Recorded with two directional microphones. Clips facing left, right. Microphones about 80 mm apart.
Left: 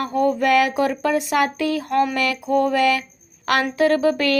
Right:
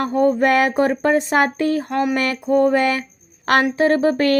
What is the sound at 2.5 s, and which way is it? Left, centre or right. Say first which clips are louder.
Speech: right 2 dB; right.